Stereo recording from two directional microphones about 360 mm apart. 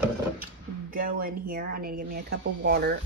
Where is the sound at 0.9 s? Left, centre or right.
Right.